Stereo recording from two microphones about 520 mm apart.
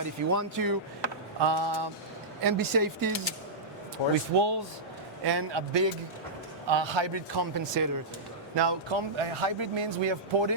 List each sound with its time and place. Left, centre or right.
0.0 s speech: right
1.4 s a man's voice: right
2.4 s speech: right
4.4 s a man's voice: right